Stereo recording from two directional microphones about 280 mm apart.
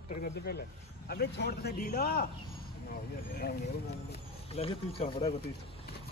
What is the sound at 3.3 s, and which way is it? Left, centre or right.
Speech, left.